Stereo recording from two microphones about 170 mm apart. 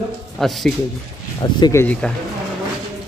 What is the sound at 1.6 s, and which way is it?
Speech, 15° left (ahead or behind).